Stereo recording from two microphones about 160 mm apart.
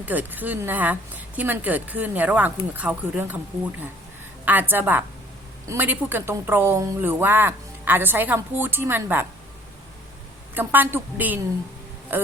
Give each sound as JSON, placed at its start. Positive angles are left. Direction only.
{"t": 0.0, "sound": "a woman's voice", "side_deg": -10}
{"t": 10.5, "sound": "a woman's voice", "side_deg": -10}